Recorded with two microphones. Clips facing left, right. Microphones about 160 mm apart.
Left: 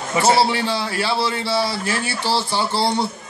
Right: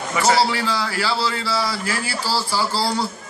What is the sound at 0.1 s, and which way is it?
Speech, 25° left (ahead or behind).